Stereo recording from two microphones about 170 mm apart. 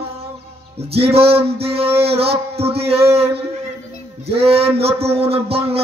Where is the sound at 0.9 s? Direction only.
35° right (ahead or behind).